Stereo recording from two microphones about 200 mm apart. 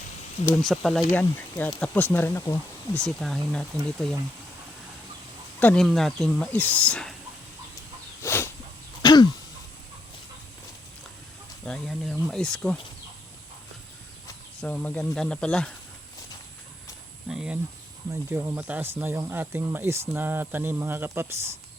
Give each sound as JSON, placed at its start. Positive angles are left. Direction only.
{"t": 0.4, "sound": "speech", "side_deg": 0}
{"t": 5.5, "sound": "speech", "side_deg": 5}
{"t": 8.2, "sound": "a sound", "side_deg": 10}
{"t": 9.0, "sound": "throat clearing", "side_deg": 20}
{"t": 11.6, "sound": "speech", "side_deg": 0}
{"t": 14.6, "sound": "speech", "side_deg": 5}
{"t": 17.2, "sound": "speech", "side_deg": -5}